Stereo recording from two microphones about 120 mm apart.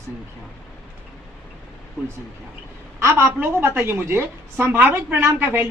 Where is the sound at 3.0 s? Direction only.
20° right (ahead or behind).